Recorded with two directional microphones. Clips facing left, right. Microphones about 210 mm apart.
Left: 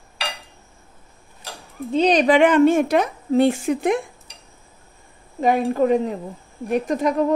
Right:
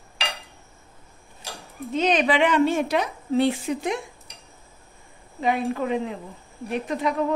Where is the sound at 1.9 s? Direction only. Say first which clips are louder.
Left 5 dB; 35° left (ahead or behind); by 4.0 s 55° left (ahead or behind).